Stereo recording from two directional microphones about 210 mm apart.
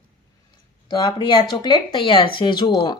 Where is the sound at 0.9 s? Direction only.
20° left (ahead or behind).